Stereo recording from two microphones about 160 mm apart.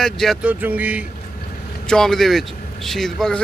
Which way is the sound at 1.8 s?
5° left (ahead or behind).